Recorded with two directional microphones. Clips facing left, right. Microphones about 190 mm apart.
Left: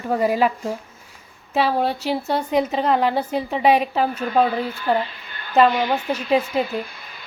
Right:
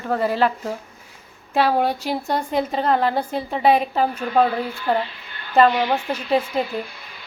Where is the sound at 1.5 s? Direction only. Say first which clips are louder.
Right 1 dB; 5° right (ahead or behind).